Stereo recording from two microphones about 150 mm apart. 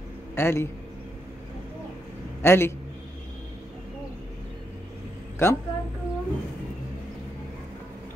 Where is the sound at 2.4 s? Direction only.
15° left (ahead or behind).